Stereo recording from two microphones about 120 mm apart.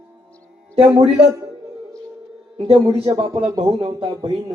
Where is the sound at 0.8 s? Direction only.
55° right (ahead or behind).